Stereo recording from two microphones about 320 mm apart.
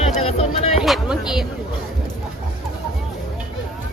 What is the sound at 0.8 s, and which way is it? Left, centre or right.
Music, centre.